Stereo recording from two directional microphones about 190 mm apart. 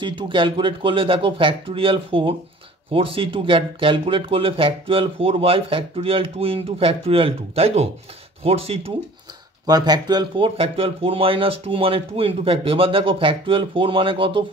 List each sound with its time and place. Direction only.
0.0 s speech: 25° right (ahead or behind)
9.7 s speech: 20° right (ahead or behind)